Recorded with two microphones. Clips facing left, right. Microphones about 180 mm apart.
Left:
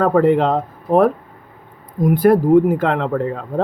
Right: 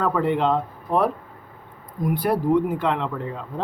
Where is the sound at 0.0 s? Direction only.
45° left (ahead or behind).